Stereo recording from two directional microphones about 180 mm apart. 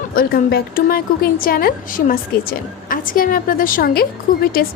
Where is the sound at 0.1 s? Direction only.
55° left (ahead or behind).